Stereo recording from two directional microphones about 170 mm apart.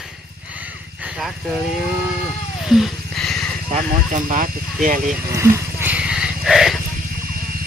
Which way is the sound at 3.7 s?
50° right (ahead or behind).